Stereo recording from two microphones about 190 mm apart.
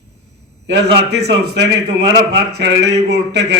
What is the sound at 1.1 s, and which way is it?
A man's voice, 60° right (ahead or behind).